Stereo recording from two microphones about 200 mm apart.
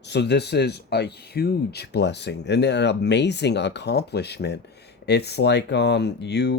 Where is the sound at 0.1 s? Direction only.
60° left (ahead or behind).